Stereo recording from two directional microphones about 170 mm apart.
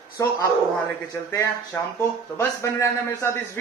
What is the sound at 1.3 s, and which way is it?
A man's voice, 15° left (ahead or behind).